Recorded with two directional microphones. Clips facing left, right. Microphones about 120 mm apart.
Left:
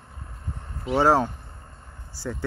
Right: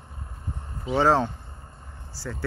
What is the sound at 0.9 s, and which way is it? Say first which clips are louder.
Speech: left 1 dB; 10° left (ahead or behind).